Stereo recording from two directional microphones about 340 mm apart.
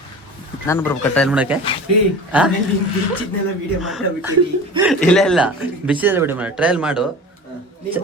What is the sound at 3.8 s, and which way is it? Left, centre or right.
Speech, centre.